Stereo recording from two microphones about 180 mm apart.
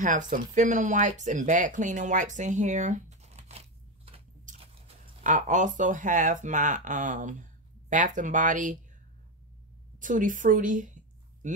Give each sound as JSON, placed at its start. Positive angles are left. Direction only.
{"t": 0.0, "sound": "speech", "side_deg": -45}
{"t": 4.5, "sound": "biting", "side_deg": -45}
{"t": 5.2, "sound": "speech", "side_deg": -45}
{"t": 9.9, "sound": "speech", "side_deg": -45}